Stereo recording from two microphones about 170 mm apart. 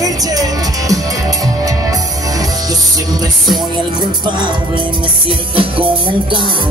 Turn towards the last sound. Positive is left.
turn(degrees=-30)  # may be behind; listen again after turning